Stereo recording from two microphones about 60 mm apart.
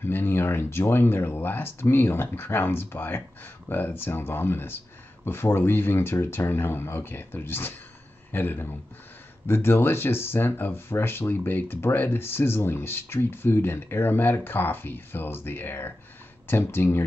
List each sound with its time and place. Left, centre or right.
0.0 s speech: left